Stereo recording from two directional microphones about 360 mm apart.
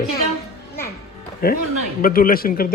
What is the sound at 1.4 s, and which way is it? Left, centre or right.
Speech, left.